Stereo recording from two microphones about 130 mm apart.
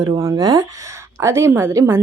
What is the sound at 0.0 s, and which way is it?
Speech, 25° right (ahead or behind).